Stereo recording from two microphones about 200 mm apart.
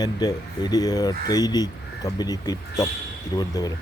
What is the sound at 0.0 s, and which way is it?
Speech, 20° left (ahead or behind).